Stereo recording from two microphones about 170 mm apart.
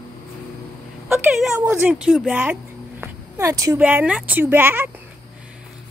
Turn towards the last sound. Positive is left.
turn(degrees=-15)  # may be behind; listen again after turning